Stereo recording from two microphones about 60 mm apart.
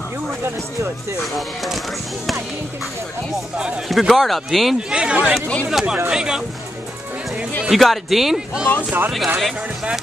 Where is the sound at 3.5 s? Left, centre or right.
Centre.